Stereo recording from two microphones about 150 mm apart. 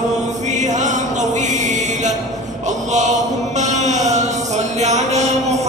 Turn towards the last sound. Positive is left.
turn(degrees=-50)  # may be behind; listen again after turning